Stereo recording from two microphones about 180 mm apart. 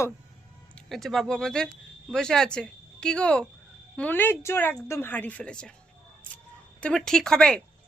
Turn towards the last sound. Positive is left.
turn(degrees=5)  # may be behind; listen again after turning